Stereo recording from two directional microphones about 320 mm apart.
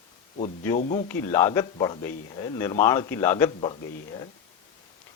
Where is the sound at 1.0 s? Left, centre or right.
Centre.